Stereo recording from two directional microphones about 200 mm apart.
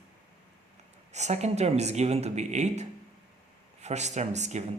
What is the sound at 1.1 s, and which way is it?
Speech, 35° right (ahead or behind).